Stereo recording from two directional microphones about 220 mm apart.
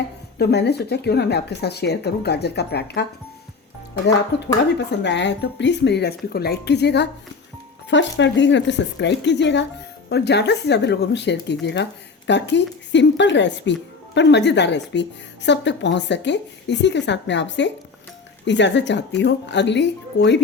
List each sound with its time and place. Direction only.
0.3 s speech: 50° left (ahead or behind)
4.3 s speech: 50° left (ahead or behind)